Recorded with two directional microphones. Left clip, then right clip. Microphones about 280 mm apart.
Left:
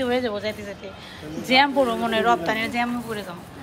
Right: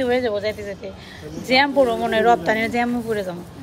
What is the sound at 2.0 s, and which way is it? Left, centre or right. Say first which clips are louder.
Speech: right 4 dB; centre.